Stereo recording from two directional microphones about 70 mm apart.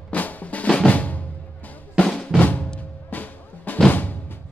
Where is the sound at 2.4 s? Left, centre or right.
Centre.